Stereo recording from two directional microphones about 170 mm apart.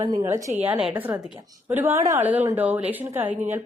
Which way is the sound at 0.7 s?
10° right (ahead or behind).